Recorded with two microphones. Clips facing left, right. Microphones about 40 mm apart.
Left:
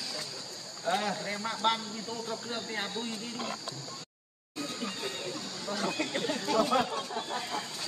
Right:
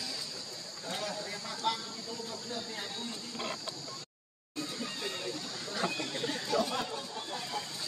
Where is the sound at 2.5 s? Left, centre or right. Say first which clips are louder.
Left 4 dB; left.